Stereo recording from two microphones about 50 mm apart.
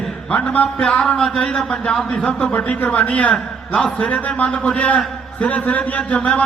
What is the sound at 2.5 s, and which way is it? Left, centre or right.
A man's voice, left.